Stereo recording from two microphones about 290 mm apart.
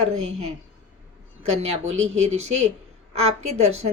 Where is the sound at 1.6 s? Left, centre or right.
Right.